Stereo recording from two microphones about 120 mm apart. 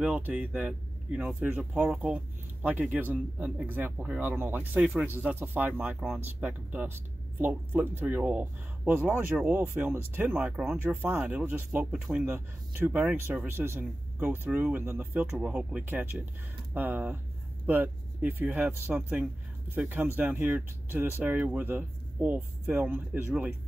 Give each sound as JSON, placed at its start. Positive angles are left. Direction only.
{"t": 0.0, "sound": "speech", "side_deg": -10}